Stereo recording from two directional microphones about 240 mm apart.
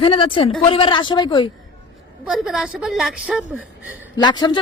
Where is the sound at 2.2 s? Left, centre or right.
Centre.